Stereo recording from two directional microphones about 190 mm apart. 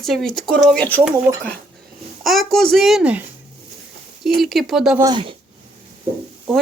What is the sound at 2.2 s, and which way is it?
Speech, centre (ahead or behind).